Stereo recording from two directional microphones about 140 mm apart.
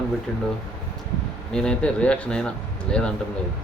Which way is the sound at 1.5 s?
5° left (ahead or behind).